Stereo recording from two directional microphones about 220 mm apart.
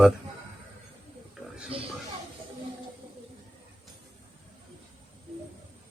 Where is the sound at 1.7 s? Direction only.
25° right (ahead or behind).